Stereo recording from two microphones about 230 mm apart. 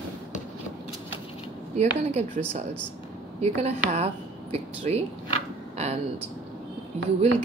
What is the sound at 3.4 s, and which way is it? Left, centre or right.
Speech, right.